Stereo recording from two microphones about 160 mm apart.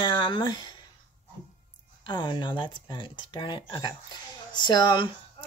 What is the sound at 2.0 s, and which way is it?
Speech, 30° left (ahead or behind).